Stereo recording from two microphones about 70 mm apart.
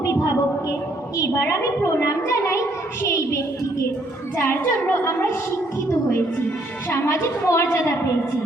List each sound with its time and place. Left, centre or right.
0.7 s a woman's voice: left